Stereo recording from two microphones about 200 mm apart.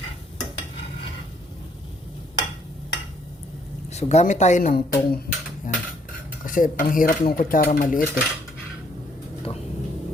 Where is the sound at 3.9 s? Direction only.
35° left (ahead or behind).